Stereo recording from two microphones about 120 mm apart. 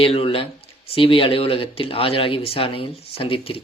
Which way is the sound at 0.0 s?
50° left (ahead or behind).